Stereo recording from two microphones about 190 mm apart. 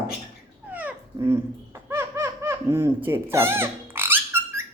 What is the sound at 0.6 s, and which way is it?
Babbling, 10° right (ahead or behind).